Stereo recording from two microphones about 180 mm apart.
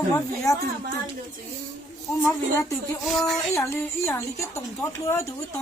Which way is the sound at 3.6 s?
15° left (ahead or behind).